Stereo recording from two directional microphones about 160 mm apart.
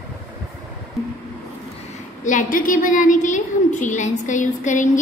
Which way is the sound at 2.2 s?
55° left (ahead or behind).